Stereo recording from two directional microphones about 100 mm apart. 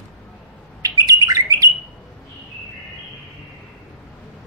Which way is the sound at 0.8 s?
40° right (ahead or behind).